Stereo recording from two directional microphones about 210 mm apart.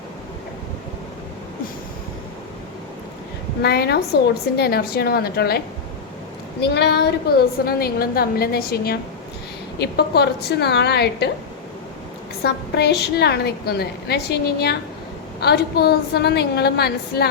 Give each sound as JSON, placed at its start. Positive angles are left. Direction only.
{"t": 3.6, "sound": "a woman's voice", "side_deg": 50}
{"t": 12.4, "sound": "a woman's voice", "side_deg": 50}